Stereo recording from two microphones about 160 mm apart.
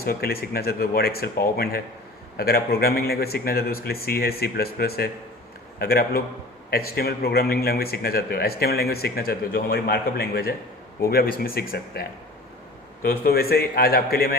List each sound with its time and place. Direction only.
0.0 s a man's voice: 70° left (ahead or behind)
13.1 s a man's voice: 70° left (ahead or behind)